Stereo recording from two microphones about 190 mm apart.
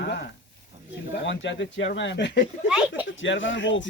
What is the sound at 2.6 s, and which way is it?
Speech, 5° right (ahead or behind).